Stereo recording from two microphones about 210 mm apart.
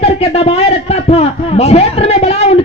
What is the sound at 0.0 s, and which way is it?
A man's voice, 30° left (ahead or behind).